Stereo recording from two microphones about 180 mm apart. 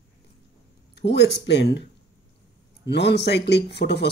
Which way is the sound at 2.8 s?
70° left (ahead or behind).